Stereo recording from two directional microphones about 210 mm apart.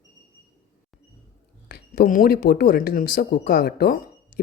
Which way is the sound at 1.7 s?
40° left (ahead or behind).